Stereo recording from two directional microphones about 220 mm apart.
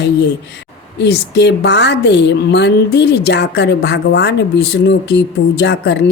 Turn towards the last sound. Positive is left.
turn(degrees=50)  # may be behind; listen again after turning